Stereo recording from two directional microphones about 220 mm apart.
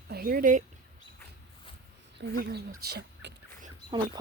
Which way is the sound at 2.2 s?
45° right (ahead or behind).